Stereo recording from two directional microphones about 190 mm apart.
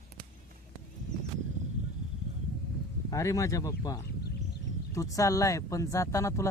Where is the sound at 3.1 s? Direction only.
15° left (ahead or behind).